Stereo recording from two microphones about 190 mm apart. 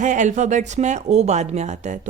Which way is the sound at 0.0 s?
40° right (ahead or behind).